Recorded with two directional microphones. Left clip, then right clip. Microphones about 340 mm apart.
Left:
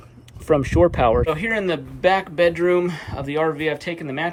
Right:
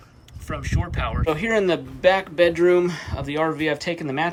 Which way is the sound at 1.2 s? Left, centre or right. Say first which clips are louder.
Even; centre.